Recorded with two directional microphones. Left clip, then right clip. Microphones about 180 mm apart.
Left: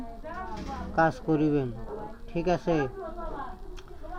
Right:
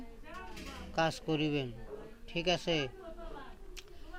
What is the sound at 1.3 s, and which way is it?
Speech, 5° right (ahead or behind).